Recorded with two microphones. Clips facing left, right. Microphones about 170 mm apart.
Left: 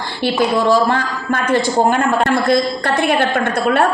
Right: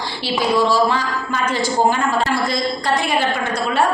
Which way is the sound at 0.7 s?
55° left (ahead or behind).